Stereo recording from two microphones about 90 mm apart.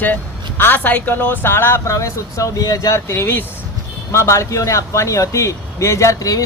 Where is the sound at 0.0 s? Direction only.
20° left (ahead or behind).